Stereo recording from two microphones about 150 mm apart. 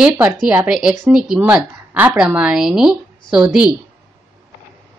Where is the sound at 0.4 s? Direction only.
5° right (ahead or behind).